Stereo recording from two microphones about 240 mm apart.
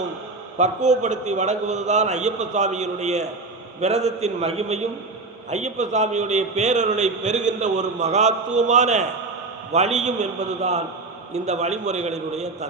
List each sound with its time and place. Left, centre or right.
0.6 s a man's voice: right